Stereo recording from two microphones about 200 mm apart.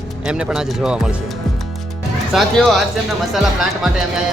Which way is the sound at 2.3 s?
Centre (ahead or behind).